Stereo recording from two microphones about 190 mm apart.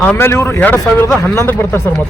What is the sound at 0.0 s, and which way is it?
A man's voice, 10° left (ahead or behind).